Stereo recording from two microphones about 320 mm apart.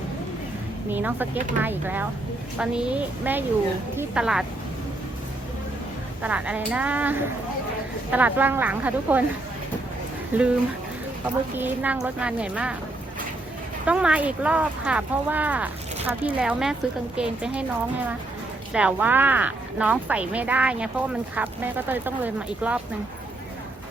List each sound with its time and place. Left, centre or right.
0.9 s speech: centre
6.2 s speech: centre
10.3 s speech: centre
13.8 s speech: centre
18.7 s speech: centre